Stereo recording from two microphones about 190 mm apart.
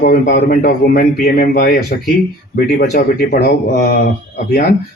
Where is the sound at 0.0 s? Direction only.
50° left (ahead or behind).